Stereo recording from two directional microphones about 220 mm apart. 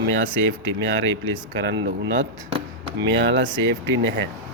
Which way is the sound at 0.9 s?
55° right (ahead or behind).